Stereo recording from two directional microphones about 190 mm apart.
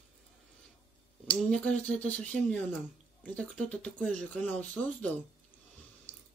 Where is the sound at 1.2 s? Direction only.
5° left (ahead or behind).